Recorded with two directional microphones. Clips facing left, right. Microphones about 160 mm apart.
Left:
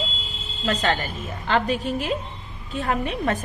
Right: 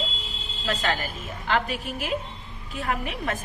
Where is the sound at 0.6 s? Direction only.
40° left (ahead or behind).